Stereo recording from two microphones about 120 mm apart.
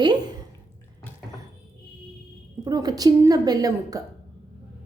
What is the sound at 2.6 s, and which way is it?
A woman's voice, 35° right (ahead or behind).